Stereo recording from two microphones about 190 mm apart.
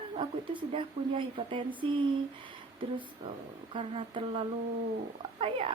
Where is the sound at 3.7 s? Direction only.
25° right (ahead or behind).